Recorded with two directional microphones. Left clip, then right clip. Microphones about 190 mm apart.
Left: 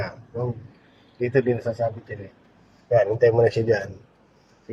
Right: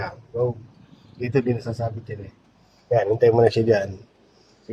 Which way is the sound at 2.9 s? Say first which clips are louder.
Even; 25° right (ahead or behind).